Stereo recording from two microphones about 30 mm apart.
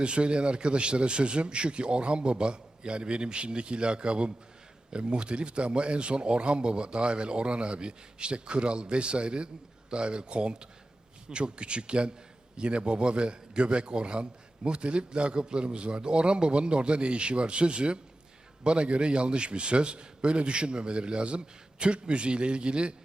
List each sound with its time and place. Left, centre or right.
0.0 s a man's voice: right